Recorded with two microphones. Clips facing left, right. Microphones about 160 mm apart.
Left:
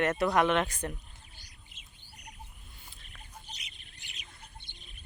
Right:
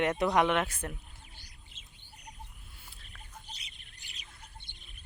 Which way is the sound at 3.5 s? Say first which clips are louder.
Left 1 dB; 35° right (ahead or behind).